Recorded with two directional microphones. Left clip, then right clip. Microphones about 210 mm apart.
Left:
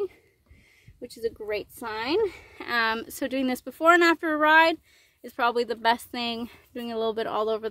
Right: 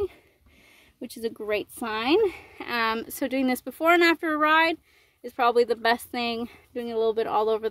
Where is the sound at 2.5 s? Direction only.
5° right (ahead or behind).